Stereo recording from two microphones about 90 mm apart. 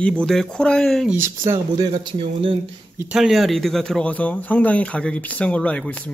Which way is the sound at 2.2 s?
85° right.